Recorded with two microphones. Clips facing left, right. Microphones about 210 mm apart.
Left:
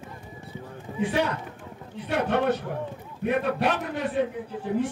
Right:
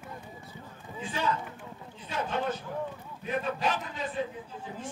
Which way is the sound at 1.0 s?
70° left (ahead or behind).